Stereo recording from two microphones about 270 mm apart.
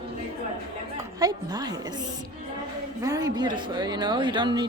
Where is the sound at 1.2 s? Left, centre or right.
Centre.